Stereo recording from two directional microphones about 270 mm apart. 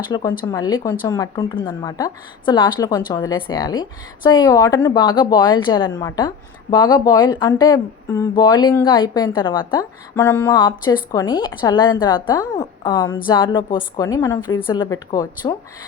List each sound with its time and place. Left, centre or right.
0.1 s speech: centre